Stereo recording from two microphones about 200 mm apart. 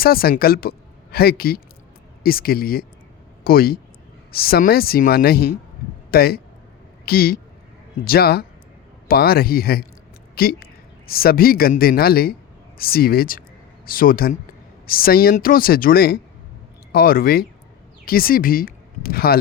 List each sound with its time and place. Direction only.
0.0 s a woman's voice: 50° left (ahead or behind)